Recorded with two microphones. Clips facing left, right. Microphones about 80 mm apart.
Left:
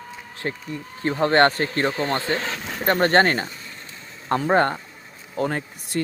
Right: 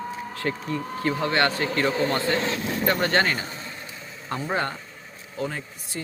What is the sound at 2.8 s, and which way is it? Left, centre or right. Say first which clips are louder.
Speech: left 5 dB; left.